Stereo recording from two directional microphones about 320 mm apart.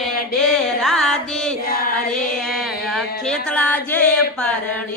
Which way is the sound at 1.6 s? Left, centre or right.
Left.